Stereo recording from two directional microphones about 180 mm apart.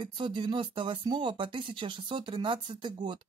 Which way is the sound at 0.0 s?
25° right (ahead or behind).